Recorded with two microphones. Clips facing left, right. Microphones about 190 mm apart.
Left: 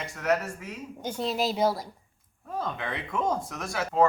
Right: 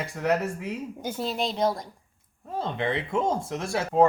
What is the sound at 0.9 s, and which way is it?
Speech, 5° right (ahead or behind).